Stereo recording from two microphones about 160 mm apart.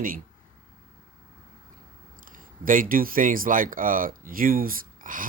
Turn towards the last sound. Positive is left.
turn(degrees=-60)  # may be behind; listen again after turning